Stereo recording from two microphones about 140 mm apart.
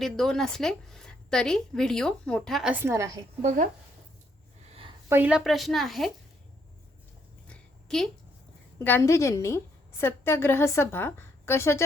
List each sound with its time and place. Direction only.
0.0 s a woman's voice: centre (ahead or behind)
2.7 s a woman's voice: 20° right (ahead or behind)
4.7 s a sound: 40° right (ahead or behind)
5.0 s a woman's voice: 10° right (ahead or behind)
7.4 s a sound: 5° left (ahead or behind)
8.8 s a woman's voice: 15° left (ahead or behind)